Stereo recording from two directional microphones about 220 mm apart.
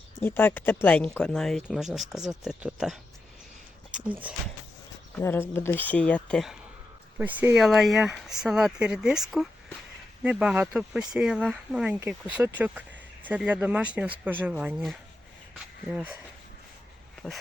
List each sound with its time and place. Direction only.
0.2 s speech: 10° left (ahead or behind); by 4.4 s 5° right (ahead or behind)
5.1 s speech: 10° left (ahead or behind)